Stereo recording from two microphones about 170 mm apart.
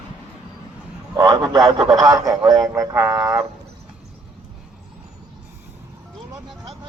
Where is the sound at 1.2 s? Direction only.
20° right (ahead or behind).